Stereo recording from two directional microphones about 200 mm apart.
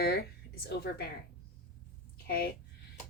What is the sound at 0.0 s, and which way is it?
Speech, 50° left (ahead or behind).